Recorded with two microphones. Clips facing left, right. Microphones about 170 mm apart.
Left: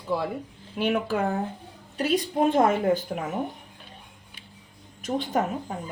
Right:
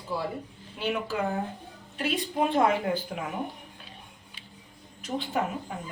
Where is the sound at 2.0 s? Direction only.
40° left (ahead or behind).